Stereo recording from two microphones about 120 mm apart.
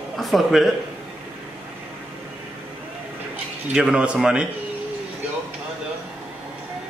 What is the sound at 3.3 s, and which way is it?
A man's voice, 5° right (ahead or behind).